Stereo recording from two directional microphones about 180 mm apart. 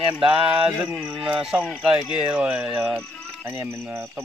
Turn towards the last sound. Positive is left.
turn(degrees=-5)  # may be behind; listen again after turning